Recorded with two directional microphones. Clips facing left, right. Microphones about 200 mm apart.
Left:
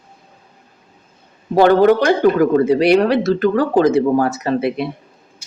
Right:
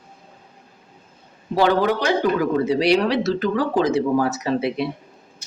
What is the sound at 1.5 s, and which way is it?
Speech, 55° left (ahead or behind).